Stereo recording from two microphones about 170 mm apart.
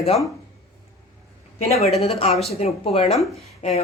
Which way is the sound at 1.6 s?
40° left (ahead or behind).